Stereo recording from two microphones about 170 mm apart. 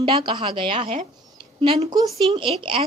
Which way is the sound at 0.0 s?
30° right (ahead or behind).